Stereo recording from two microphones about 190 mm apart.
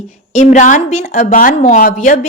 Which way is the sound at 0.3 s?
40° left (ahead or behind).